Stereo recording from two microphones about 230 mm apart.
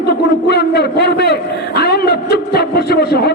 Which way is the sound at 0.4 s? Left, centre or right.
Left.